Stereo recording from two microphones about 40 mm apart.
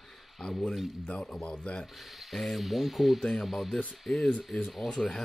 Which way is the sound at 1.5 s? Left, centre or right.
Left.